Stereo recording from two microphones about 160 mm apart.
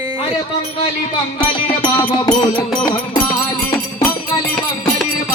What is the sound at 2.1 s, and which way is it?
Music, 30° left (ahead or behind).